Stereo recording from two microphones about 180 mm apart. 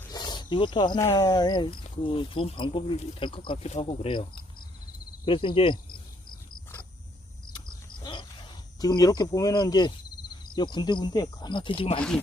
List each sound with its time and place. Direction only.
0.1 s wild animals: 25° left (ahead or behind)
0.5 s speech: 25° left (ahead or behind)
7.5 s cricket: 25° left (ahead or behind)
10.5 s speech: 25° left (ahead or behind)